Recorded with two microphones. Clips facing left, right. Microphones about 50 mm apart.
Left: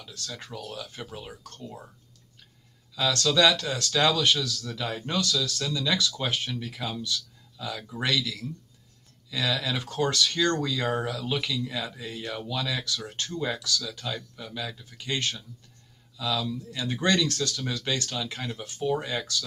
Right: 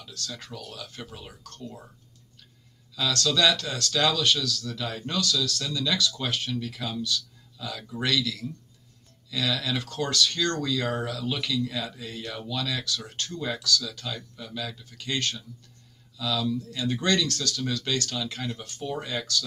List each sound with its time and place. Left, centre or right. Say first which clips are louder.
0.3 s speech: left 5 dB; centre
1.4 s speech: even; left
3.0 s speech: left 2 dB; left
6.7 s speech: right 1 dB; centre
13.3 s speech: right 1 dB; centre